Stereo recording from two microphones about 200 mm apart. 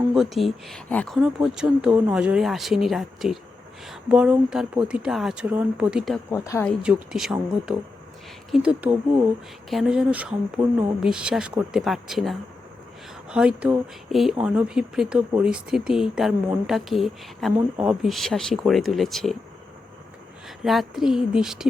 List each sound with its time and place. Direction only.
0.1 s speech: centre (ahead or behind)
6.3 s speech: 15° left (ahead or behind)
6.7 s speech: centre (ahead or behind)
20.7 s speech: centre (ahead or behind)